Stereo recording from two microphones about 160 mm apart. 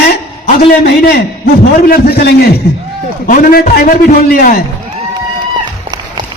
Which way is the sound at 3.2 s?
60° left (ahead or behind).